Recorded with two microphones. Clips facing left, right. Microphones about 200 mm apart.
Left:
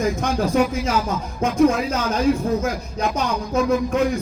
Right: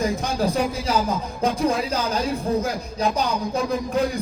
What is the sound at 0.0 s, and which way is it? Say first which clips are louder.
Speech: left 2 dB; 35° right (ahead or behind).